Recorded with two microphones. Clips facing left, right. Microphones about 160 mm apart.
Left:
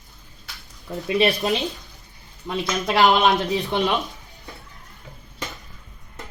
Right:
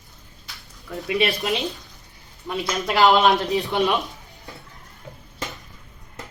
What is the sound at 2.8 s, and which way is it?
Speech, 20° left (ahead or behind).